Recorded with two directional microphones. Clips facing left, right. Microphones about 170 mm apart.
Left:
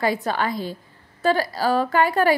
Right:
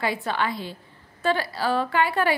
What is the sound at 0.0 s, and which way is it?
A woman's voice, 40° left (ahead or behind).